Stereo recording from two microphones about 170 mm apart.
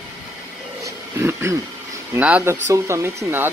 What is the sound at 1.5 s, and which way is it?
Speech, 15° right (ahead or behind).